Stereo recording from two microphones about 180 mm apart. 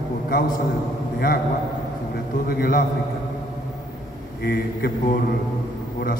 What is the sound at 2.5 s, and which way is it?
Speech, 55° left (ahead or behind).